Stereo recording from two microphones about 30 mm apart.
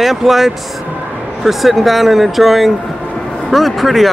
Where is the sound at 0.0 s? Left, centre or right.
Centre.